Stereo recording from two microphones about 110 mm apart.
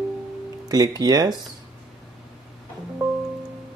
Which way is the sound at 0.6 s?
35° right (ahead or behind).